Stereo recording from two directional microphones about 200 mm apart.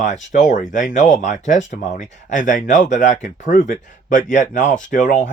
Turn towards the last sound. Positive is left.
turn(degrees=40)  # may be behind; listen again after turning